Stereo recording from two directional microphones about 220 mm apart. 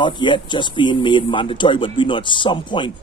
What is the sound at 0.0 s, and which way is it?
Speech, 20° left (ahead or behind).